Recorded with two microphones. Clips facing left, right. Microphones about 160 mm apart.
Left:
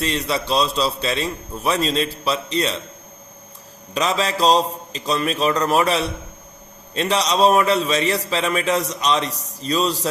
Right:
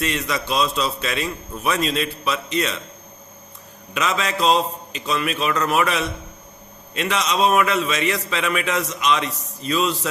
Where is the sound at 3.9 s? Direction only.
35° left (ahead or behind).